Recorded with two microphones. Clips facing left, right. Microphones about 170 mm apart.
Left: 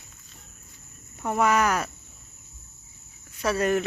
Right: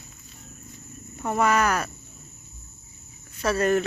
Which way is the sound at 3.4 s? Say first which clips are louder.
Right 2 dB; 15° left (ahead or behind).